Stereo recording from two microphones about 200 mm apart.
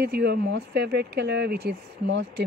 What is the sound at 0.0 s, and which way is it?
Speech, 55° right (ahead or behind).